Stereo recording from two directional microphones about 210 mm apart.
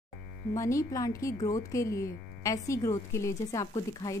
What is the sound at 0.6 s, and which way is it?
Speech, 15° left (ahead or behind).